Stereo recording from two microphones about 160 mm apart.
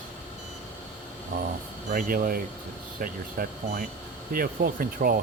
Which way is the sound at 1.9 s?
65° right (ahead or behind).